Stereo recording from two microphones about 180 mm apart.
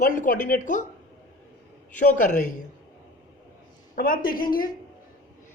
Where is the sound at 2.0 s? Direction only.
45° left (ahead or behind).